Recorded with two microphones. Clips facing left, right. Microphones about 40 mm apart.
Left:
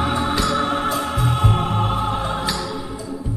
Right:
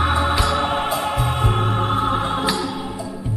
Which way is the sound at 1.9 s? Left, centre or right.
Right.